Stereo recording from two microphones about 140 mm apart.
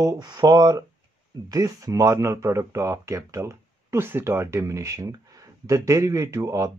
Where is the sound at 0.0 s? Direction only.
25° right (ahead or behind).